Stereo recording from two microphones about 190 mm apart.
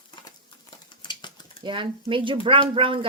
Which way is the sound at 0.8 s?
25° left (ahead or behind).